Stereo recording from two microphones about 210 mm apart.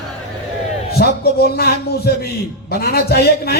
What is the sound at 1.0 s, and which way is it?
A man's voice, 50° left (ahead or behind).